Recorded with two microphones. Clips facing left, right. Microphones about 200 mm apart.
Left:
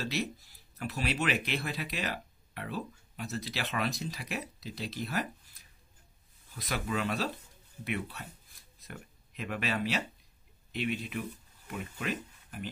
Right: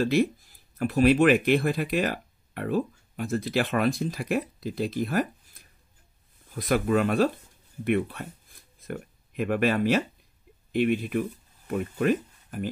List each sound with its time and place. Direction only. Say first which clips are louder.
0.0 s speech: right 12 dB; 50° right (ahead or behind)
6.5 s speech: right 11 dB; 50° right (ahead or behind)